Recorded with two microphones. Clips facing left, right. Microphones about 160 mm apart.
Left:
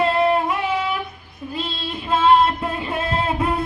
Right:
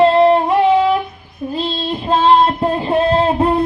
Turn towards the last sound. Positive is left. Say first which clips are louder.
# right 8 dB
turn(degrees=-35)  # may be behind; listen again after turning